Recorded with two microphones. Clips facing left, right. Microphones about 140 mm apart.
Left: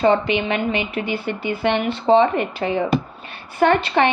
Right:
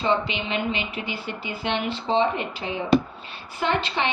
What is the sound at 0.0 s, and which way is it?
A woman's voice, 55° left (ahead or behind).